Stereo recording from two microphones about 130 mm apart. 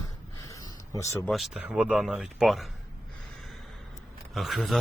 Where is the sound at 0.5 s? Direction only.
25° left (ahead or behind).